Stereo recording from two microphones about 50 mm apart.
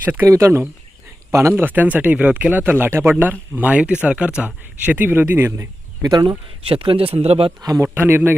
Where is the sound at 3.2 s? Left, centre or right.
Right.